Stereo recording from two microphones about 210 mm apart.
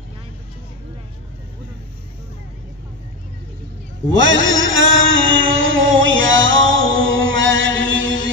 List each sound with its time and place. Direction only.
4.1 s mantra: 65° right (ahead or behind)